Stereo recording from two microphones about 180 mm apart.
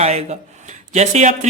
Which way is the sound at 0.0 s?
35° right (ahead or behind).